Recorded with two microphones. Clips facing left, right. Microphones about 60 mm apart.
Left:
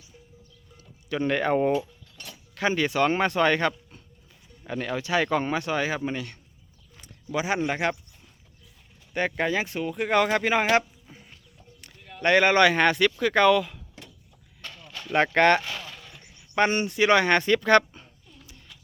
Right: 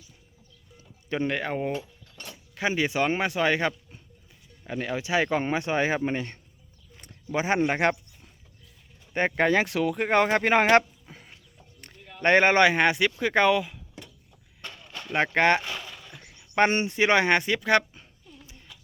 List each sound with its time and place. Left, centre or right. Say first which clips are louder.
1.2 s speech: left 5 dB; centre
2.6 s speech: left 2 dB; centre; by 7.9 s right
9.1 s speech: right 2 dB; right
9.5 s speech: right 4 dB; right
9.9 s speech: left 1 dB; right
10.4 s speech: right 2 dB; right
12.2 s speech: even; right
14.6 s a sound: even; right
15.1 s speech: left 2 dB; centre
15.9 s horse: even; centre
16.6 s speech: right 1 dB; right
16.8 s speech: left 1 dB; right; by 18.4 s centre